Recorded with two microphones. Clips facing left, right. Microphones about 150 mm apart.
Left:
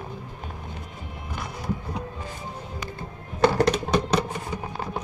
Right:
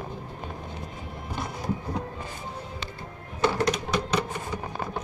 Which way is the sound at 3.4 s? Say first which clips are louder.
Left 4 dB; 45° left (ahead or behind).